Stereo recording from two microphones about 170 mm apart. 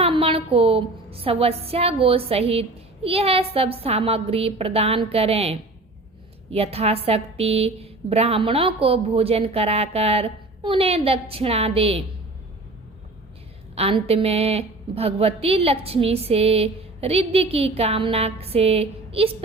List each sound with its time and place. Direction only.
0.0 s a woman's voice: 30° right (ahead or behind)
13.7 s a woman's voice: 35° right (ahead or behind)